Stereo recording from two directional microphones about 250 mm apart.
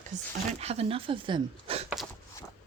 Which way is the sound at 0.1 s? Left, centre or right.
Right.